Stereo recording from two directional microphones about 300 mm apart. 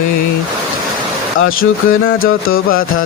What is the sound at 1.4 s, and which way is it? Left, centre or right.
Music, left.